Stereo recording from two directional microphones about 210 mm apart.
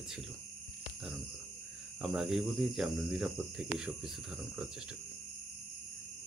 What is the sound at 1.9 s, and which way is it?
Speech, centre (ahead or behind).